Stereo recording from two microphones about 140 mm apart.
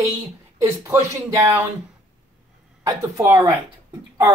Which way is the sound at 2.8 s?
20° right (ahead or behind).